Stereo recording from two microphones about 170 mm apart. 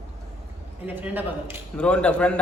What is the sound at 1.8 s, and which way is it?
Speech, 5° left (ahead or behind).